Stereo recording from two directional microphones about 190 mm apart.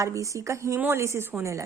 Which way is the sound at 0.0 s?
15° right (ahead or behind).